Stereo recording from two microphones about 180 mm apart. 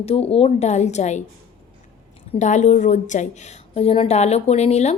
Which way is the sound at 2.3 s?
40° left (ahead or behind).